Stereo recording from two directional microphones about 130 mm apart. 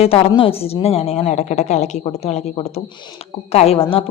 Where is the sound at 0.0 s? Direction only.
50° left (ahead or behind).